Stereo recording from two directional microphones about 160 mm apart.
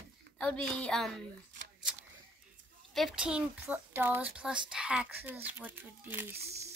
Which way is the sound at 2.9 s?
Centre (ahead or behind).